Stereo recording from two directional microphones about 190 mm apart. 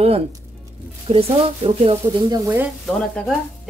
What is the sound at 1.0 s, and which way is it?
Speech, 30° right (ahead or behind).